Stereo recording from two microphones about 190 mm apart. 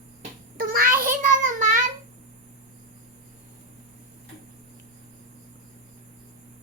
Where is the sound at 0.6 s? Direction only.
50° right (ahead or behind).